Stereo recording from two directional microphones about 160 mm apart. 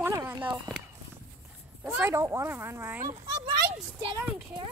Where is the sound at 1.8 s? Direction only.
10° right (ahead or behind); by 4.6 s 30° right (ahead or behind).